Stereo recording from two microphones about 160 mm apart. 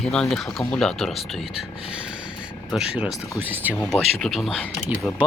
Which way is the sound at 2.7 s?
5° right (ahead or behind).